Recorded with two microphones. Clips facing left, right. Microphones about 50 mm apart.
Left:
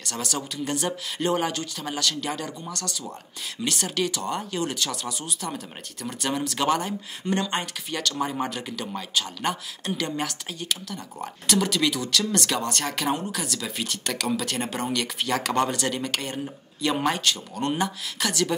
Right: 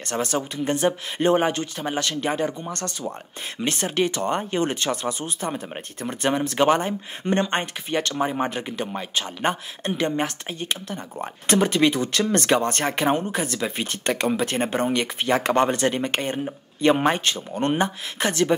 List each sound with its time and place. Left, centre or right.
0.0 s speech: right